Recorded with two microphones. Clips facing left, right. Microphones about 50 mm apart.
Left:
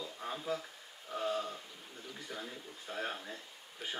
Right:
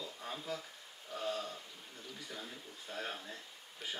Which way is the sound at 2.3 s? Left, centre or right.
Left.